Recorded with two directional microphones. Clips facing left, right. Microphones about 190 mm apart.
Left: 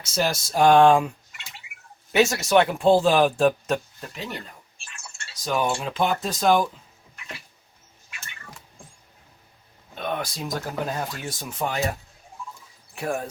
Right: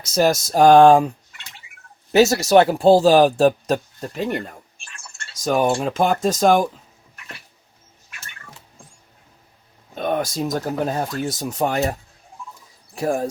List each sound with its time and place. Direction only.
0.0 s speech: 40° right (ahead or behind)
2.1 s speech: 40° right (ahead or behind)
9.9 s speech: 45° right (ahead or behind)
12.9 s speech: 35° right (ahead or behind)